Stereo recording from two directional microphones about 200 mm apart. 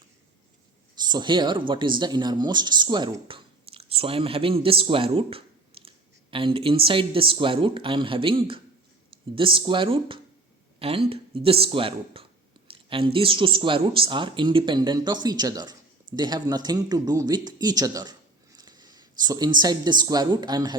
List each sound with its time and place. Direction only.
0.9 s speech: 20° right (ahead or behind)